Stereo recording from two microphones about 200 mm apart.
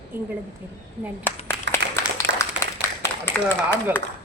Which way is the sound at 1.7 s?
15° left (ahead or behind).